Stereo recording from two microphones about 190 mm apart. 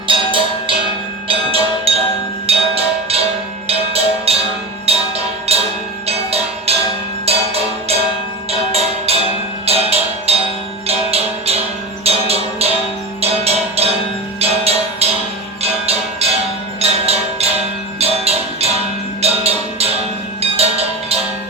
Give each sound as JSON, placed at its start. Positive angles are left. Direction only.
{"t": 0.1, "sound": "music", "side_deg": -25}
{"t": 6.1, "sound": "a sound", "side_deg": -30}
{"t": 7.3, "sound": "music", "side_deg": -30}
{"t": 20.4, "sound": "cowbell", "side_deg": -30}